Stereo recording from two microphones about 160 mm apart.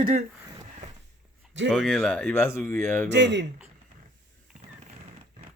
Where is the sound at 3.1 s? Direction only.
90° right.